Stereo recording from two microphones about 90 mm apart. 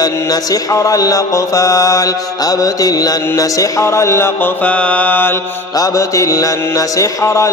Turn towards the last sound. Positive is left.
turn(degrees=35)  # may be behind; listen again after turning